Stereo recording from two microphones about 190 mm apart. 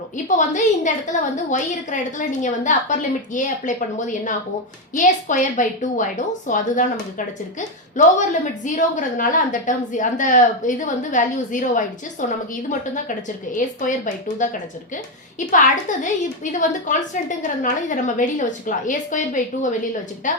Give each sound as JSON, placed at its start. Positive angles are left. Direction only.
{"t": 0.3, "sound": "a woman's voice", "side_deg": 40}
{"t": 7.9, "sound": "a woman's voice", "side_deg": 40}
{"t": 13.6, "sound": "a woman's voice", "side_deg": 45}